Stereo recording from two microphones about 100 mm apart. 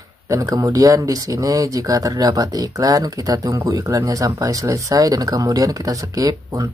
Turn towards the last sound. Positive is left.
turn(degrees=-35)  # may be behind; listen again after turning